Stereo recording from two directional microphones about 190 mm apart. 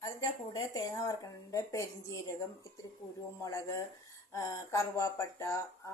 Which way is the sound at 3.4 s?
15° left (ahead or behind).